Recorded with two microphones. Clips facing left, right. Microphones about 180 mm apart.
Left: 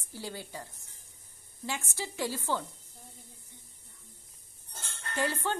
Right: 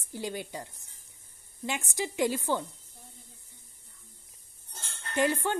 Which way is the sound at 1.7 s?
15° right (ahead or behind).